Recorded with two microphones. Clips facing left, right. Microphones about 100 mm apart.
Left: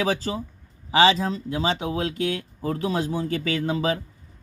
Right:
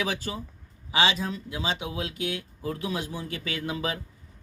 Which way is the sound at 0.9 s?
40° left (ahead or behind).